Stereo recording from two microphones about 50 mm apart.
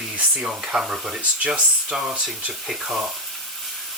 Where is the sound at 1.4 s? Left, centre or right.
Right.